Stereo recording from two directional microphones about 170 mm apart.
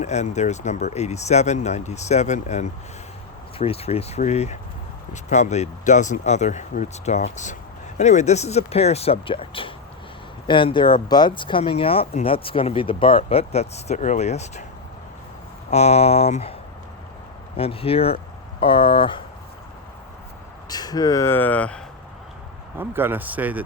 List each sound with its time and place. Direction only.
0.0 s speech: 40° left (ahead or behind)
15.7 s speech: 40° left (ahead or behind)
17.6 s speech: 35° left (ahead or behind)
20.7 s speech: 25° left (ahead or behind)
22.8 s speech: 10° right (ahead or behind)